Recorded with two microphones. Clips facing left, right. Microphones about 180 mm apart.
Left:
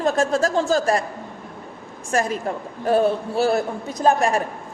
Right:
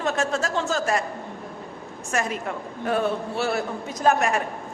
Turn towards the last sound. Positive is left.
turn(degrees=30)  # may be behind; listen again after turning